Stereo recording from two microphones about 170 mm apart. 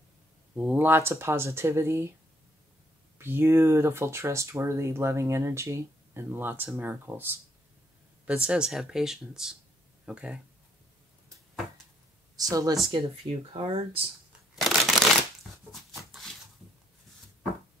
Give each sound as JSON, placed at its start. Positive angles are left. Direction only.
{"t": 0.6, "sound": "speech", "side_deg": -10}
{"t": 3.2, "sound": "speech", "side_deg": -15}
{"t": 12.4, "sound": "speech", "side_deg": -20}
{"t": 13.5, "sound": "speech", "side_deg": -35}
{"t": 14.5, "sound": "a sound", "side_deg": 0}